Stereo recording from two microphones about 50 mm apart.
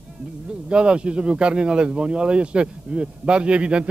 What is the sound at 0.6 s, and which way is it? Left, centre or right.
Speech, centre.